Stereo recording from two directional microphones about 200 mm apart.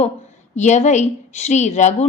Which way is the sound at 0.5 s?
35° left (ahead or behind).